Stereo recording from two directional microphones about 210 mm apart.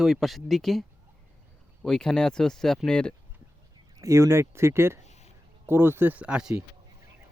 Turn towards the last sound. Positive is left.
turn(degrees=-5)  # may be behind; listen again after turning